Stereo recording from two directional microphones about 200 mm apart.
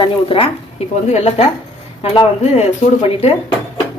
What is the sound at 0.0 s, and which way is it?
Speech, 25° left (ahead or behind).